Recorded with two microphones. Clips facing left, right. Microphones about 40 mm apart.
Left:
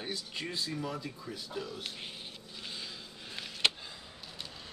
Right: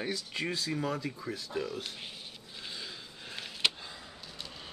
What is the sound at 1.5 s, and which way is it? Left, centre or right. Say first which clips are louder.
Speech: right 4 dB; right.